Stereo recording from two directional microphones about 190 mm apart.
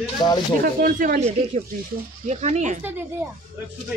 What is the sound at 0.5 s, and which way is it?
Speech, 45° right (ahead or behind).